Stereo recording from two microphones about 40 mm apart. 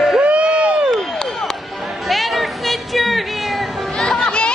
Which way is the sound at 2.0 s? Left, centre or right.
Centre.